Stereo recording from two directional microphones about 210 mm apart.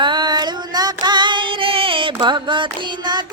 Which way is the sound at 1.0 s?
20° right (ahead or behind).